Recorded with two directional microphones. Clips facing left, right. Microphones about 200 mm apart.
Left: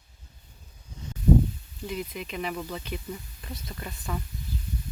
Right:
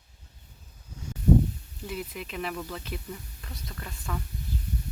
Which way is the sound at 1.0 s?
10° right (ahead or behind).